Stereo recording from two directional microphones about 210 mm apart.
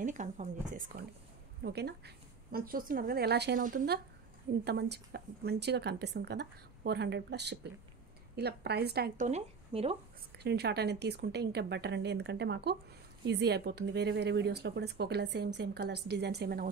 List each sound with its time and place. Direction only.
0.0 s speech: 35° right (ahead or behind)
1.6 s a woman's voice: 50° right (ahead or behind); by 9.9 s 25° right (ahead or behind)
10.3 s a woman's voice: 50° right (ahead or behind)